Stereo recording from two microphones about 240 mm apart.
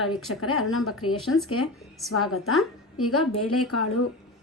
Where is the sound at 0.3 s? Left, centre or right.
Left.